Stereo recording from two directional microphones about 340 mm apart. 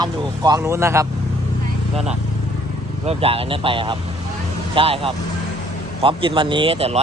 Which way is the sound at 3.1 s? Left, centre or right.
Centre.